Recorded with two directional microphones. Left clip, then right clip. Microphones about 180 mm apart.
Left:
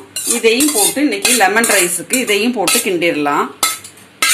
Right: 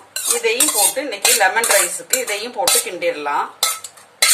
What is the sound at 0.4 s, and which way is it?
Dishes, 45° left (ahead or behind).